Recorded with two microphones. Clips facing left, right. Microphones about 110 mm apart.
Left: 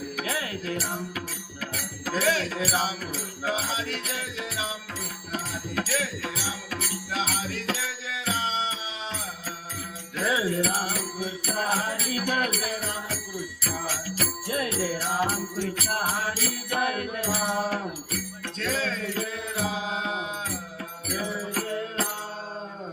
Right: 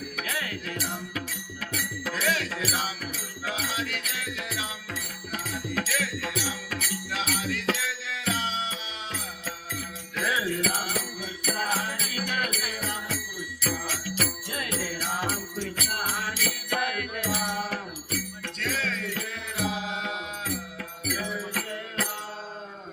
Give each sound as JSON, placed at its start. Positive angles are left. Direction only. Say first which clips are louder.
{"t": 0.2, "sound": "music", "louder": "left 2 dB", "side_deg": 30}
{"t": 10.2, "sound": "jingle bell", "louder": "left 2 dB", "side_deg": 30}
{"t": 10.5, "sound": "music", "louder": "left 2 dB", "side_deg": 35}